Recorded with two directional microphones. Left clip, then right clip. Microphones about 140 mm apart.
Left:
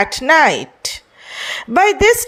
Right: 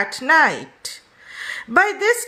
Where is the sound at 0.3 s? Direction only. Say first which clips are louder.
Left 3 dB; 35° left (ahead or behind).